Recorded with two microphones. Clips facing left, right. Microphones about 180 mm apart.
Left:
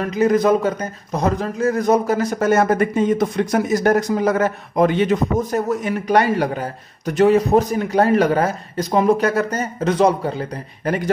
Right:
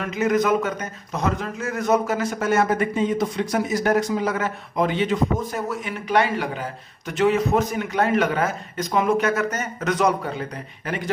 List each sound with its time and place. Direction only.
0.0 s a man's voice: 35° left (ahead or behind)